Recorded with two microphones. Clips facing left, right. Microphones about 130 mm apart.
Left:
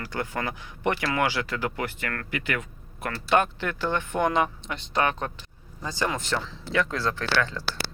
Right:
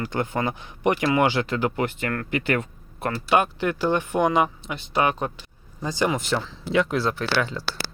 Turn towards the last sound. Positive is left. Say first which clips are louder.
# right 2 dB
turn(degrees=-10)  # may be behind; listen again after turning